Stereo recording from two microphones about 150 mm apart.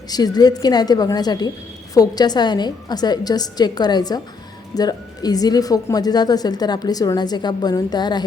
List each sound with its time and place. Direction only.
0.1 s a woman's voice: 25° left (ahead or behind)